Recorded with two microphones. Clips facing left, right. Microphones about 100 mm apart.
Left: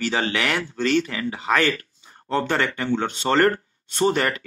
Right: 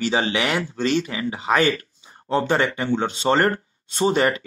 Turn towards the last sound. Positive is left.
turn(degrees=-15)  # may be behind; listen again after turning